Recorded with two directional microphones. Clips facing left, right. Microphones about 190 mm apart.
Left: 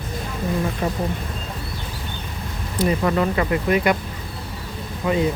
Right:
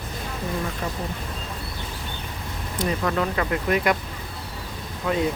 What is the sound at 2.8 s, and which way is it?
Speech, 10° left (ahead or behind).